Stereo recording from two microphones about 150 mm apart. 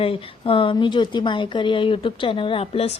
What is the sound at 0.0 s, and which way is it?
A woman's voice, 40° left (ahead or behind).